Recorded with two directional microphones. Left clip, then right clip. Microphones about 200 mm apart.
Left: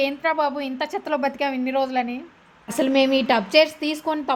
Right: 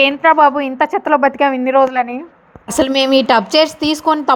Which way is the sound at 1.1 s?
15° right (ahead or behind).